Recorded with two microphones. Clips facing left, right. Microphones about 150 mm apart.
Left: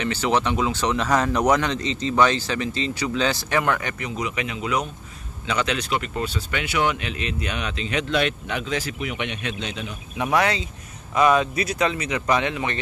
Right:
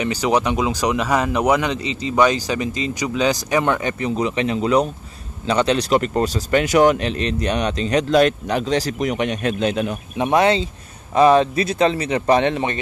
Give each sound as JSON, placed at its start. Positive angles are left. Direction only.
{"t": 0.0, "sound": "speech", "side_deg": -15}
{"t": 10.1, "sound": "speech", "side_deg": -25}